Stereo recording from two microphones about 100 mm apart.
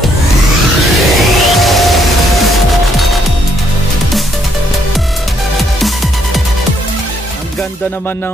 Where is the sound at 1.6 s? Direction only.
Centre (ahead or behind).